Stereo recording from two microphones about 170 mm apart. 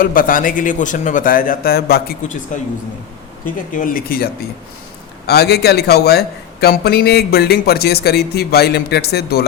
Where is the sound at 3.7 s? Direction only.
55° left (ahead or behind).